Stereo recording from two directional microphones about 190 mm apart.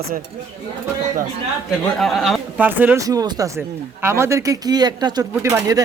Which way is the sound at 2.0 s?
Centre (ahead or behind).